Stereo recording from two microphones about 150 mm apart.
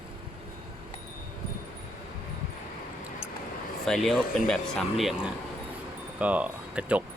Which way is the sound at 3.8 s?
Centre (ahead or behind).